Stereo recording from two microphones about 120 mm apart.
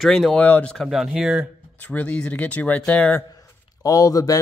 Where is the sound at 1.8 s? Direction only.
10° left (ahead or behind).